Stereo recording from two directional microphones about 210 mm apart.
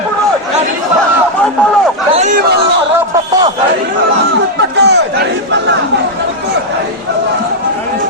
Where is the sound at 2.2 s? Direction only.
35° right (ahead or behind).